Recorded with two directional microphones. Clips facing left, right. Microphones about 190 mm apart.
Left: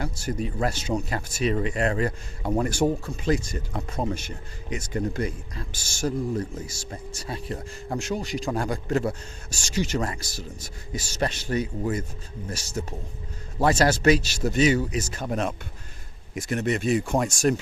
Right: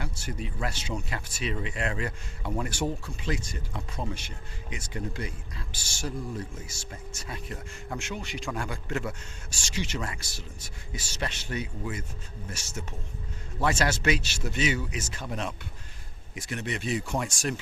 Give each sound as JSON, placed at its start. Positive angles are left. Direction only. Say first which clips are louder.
{"t": 0.0, "sound": "speech", "louder": "left 7 dB", "side_deg": 40}